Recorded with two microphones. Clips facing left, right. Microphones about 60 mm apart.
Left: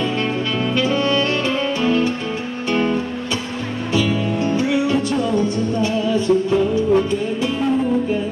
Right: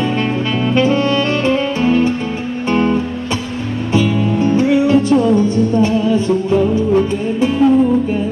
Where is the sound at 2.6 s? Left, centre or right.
Right.